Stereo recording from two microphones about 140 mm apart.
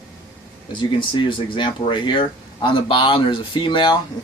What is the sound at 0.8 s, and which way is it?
Speech, 35° left (ahead or behind).